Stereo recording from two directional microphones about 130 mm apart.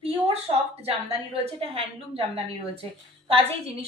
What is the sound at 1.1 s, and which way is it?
A woman's voice, 45° right (ahead or behind).